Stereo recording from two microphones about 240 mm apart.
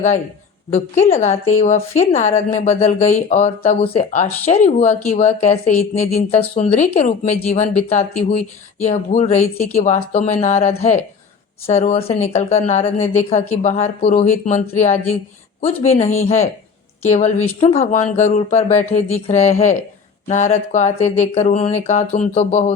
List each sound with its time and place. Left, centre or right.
0.7 s a woman's voice: centre
1.1 s speech: left
15.6 s speech: left